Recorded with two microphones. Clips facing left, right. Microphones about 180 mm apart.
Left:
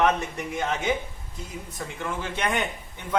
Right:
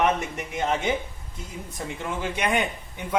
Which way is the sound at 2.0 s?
15° right (ahead or behind).